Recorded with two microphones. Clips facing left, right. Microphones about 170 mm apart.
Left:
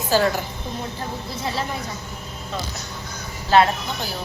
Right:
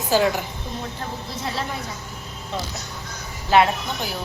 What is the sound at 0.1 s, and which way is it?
Speech, 15° right (ahead or behind).